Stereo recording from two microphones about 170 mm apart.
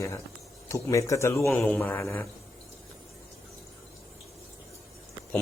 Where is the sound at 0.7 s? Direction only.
15° left (ahead or behind).